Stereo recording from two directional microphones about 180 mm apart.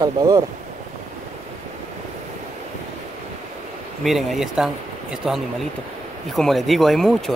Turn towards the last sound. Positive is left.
turn(degrees=0)  # may be behind; listen again after turning